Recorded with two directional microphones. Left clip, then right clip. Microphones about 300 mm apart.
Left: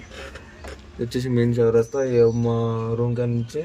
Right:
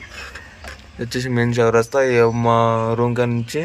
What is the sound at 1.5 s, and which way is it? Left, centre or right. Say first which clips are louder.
Speech: right 4 dB; centre.